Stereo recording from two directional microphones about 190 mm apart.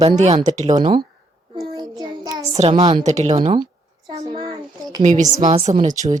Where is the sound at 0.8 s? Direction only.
25° right (ahead or behind).